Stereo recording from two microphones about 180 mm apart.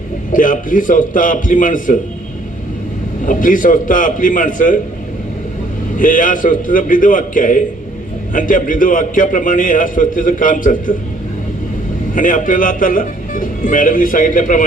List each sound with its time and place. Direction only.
0.3 s a man's voice: 50° left (ahead or behind)
3.2 s a man's voice: 50° left (ahead or behind)
6.0 s a man's voice: 50° left (ahead or behind)
12.1 s a man's voice: 45° left (ahead or behind)